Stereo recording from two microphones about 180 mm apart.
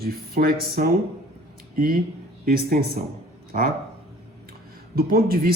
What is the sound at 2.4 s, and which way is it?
Speech, 60° right (ahead or behind).